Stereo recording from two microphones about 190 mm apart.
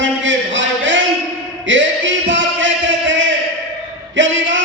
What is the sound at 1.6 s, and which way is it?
Music, 75° right (ahead or behind).